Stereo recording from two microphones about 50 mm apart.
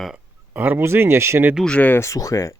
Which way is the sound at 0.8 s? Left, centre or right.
Right.